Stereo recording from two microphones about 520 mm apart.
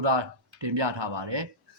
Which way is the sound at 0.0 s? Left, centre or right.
Right.